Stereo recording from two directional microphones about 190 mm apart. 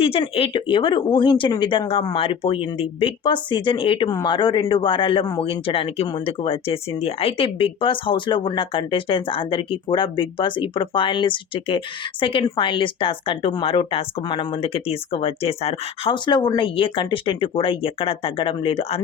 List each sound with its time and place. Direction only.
0.0 s a woman's voice: 30° left (ahead or behind)